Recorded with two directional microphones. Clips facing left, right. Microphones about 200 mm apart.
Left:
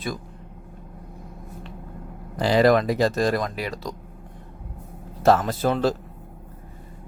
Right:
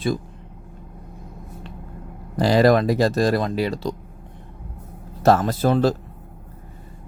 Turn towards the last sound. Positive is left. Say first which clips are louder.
# right 3 dB
turn(degrees=-40)  # may be behind; listen again after turning